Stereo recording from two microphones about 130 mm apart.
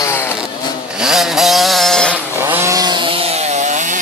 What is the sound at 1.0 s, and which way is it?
Vehicle, 5° right (ahead or behind).